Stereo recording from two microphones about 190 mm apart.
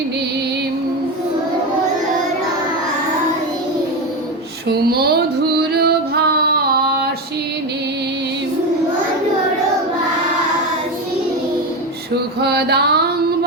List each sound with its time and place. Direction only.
4.7 s female singing: 55° right (ahead or behind)
12.4 s mantra: 60° right (ahead or behind)